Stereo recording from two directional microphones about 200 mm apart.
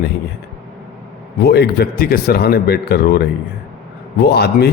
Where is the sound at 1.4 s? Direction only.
55° left (ahead or behind).